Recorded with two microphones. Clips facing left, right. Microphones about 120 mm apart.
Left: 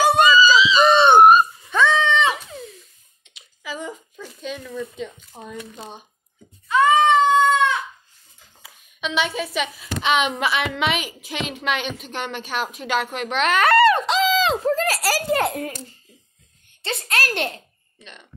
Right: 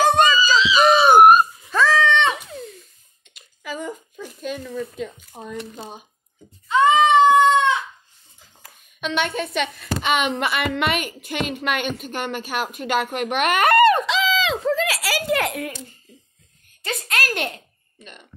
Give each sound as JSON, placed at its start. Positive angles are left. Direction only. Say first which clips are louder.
{"t": 0.5, "sound": "a sound", "louder": "left 1 dB", "side_deg": 0}
{"t": 5.4, "sound": "a woman's voice", "louder": "right 2 dB", "side_deg": 0}
{"t": 6.7, "sound": "goat", "louder": "right 1 dB", "side_deg": -20}
{"t": 8.6, "sound": "a woman's voice", "louder": "right 1 dB", "side_deg": 0}
{"t": 13.1, "sound": "speech", "louder": "even", "side_deg": -55}
{"t": 14.0, "sound": "a sound", "louder": "left 2 dB", "side_deg": 40}
{"t": 14.6, "sound": "a child's voice", "louder": "left 1 dB", "side_deg": 45}